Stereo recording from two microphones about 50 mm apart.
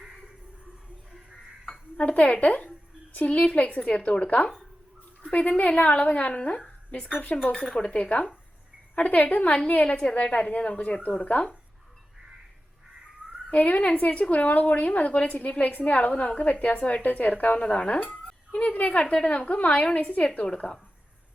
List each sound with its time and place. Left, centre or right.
2.0 s a woman's voice: left
7.5 s a woman's voice: centre
13.5 s a woman's voice: left
17.7 s speech: left